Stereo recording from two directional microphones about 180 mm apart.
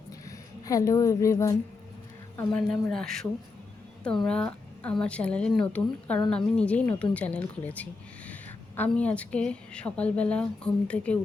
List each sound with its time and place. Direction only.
0.3 s speech: 20° left (ahead or behind)
2.5 s a woman's voice: 5° left (ahead or behind)